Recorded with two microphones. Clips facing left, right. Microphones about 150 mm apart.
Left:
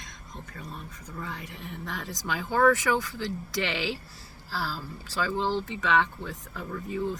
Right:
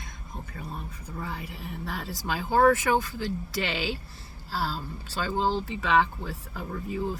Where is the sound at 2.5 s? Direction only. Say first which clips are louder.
Right 2 dB; 30° right (ahead or behind).